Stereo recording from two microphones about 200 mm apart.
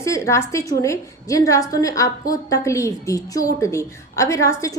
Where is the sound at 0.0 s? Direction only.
15° left (ahead or behind).